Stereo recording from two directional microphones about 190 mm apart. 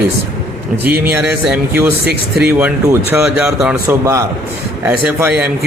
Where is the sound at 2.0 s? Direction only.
55° right (ahead or behind).